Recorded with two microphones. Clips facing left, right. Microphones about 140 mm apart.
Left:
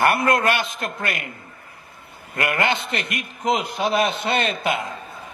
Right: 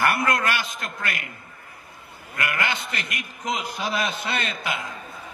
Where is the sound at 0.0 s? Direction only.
25° left (ahead or behind).